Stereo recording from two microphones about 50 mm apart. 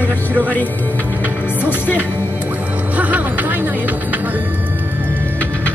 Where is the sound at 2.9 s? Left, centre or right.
Right.